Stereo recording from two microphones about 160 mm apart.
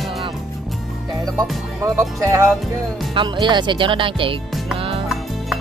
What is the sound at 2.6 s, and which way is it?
Music, centre (ahead or behind).